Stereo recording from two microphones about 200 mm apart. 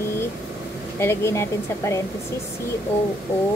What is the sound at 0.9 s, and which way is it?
Speech, 15° left (ahead or behind).